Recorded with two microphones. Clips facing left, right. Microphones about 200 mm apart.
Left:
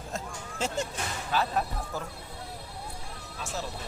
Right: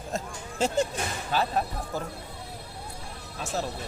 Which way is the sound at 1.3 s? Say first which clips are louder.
Right 1 dB; 30° right (ahead or behind).